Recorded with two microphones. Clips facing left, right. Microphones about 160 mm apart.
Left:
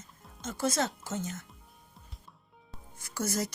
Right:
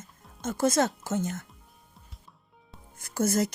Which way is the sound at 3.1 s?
50° right (ahead or behind).